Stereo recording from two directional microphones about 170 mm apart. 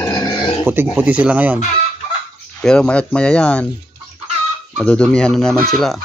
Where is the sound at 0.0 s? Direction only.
25° left (ahead or behind).